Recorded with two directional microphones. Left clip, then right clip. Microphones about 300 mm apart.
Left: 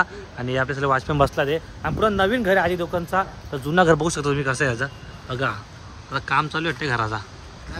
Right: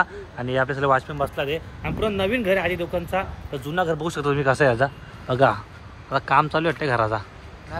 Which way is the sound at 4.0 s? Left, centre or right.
Centre.